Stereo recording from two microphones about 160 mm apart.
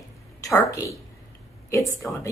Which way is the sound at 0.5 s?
20° left (ahead or behind).